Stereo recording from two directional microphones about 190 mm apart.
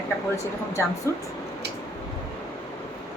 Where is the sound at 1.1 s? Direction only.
15° left (ahead or behind).